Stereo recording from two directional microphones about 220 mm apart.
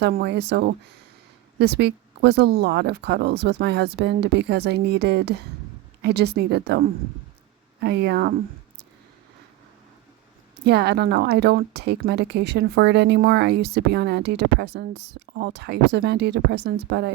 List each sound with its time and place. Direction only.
0.0 s a woman's voice: 45° right (ahead or behind)
10.7 s a woman's voice: 45° right (ahead or behind)